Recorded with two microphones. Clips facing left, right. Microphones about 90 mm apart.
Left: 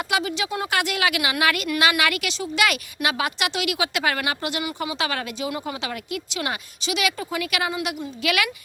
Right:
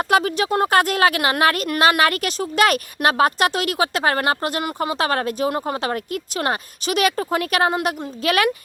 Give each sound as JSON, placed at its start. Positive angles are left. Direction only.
{"t": 0.0, "sound": "speech", "side_deg": -45}